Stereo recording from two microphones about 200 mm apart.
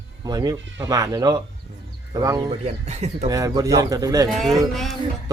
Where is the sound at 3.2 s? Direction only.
15° right (ahead or behind).